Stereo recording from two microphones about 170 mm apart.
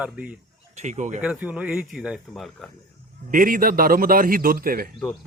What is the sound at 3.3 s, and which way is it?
A man's voice, 55° right (ahead or behind).